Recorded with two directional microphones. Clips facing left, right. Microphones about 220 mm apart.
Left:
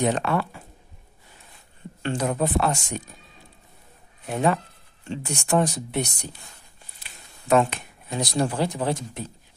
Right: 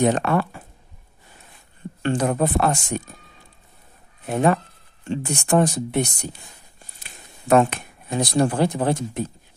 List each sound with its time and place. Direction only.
0.0 s speech: 50° right (ahead or behind)
2.0 s speech: 55° right (ahead or behind)
4.3 s speech: 50° right (ahead or behind)